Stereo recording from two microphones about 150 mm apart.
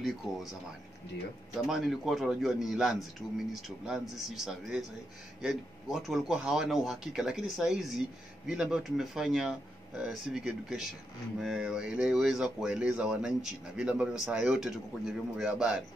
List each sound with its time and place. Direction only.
1.7 s speech: centre (ahead or behind)